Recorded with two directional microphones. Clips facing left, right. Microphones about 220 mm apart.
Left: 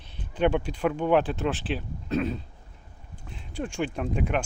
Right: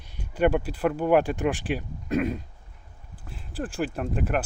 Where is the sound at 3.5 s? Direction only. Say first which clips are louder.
Right 1 dB; 5° right (ahead or behind).